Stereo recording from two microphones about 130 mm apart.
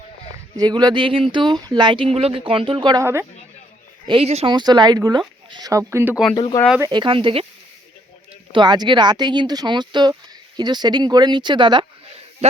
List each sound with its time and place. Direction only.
0.5 s speech: 30° right (ahead or behind)
3.0 s speech: 20° right (ahead or behind)
4.0 s speech: 45° right (ahead or behind)
4.4 s speech: 35° right (ahead or behind)
6.3 s speech: 35° left (ahead or behind)
6.8 s speech: 35° right (ahead or behind)
8.5 s speech: 35° right (ahead or behind)
12.4 s speech: 55° right (ahead or behind)